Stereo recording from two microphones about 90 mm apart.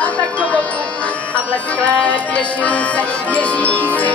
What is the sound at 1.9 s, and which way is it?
Music, 15° left (ahead or behind).